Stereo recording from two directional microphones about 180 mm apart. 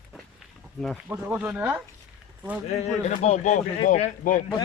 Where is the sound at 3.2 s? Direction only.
40° left (ahead or behind).